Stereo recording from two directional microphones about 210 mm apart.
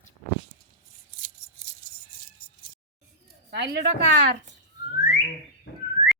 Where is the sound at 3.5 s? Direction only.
55° right (ahead or behind).